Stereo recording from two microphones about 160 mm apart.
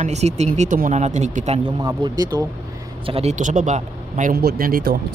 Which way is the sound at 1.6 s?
25° right (ahead or behind).